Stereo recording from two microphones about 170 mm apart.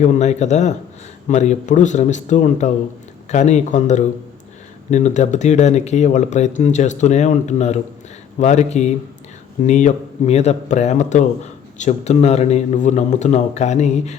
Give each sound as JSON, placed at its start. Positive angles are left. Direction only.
{"t": 0.0, "sound": "speech", "side_deg": 45}